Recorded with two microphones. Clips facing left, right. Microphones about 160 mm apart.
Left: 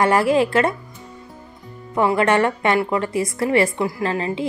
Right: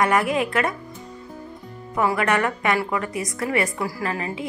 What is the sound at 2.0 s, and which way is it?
A woman's voice, 30° left (ahead or behind).